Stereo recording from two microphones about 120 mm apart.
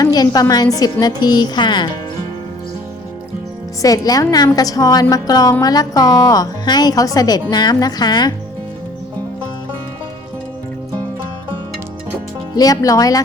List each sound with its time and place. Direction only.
0.0 s a woman's voice: 30° left (ahead or behind)
3.8 s a woman's voice: 30° left (ahead or behind)
12.5 s a woman's voice: 30° left (ahead or behind)